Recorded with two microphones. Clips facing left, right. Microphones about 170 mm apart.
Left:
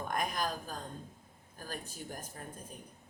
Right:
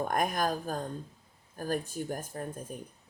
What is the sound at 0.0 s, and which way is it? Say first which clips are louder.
Speech: right 6 dB; 50° right (ahead or behind).